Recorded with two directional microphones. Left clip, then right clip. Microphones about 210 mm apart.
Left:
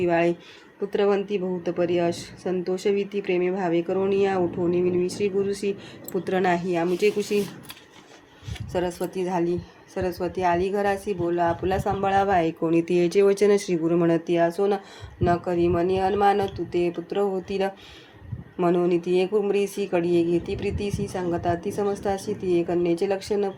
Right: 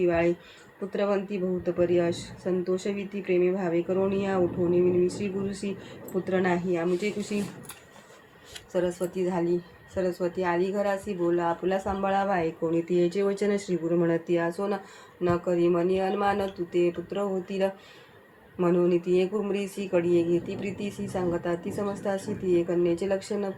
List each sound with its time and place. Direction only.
0.0 s speech: 50° left (ahead or behind)
8.7 s speech: 50° left (ahead or behind)